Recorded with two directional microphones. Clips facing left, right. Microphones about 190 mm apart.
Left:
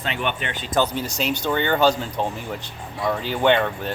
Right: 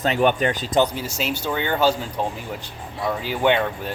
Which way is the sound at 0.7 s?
10° right (ahead or behind).